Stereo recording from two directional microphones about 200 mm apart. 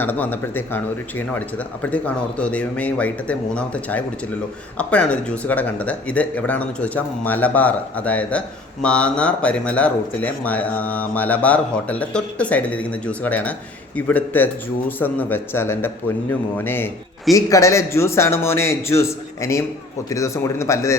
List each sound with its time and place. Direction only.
0.0 s speech: 10° left (ahead or behind)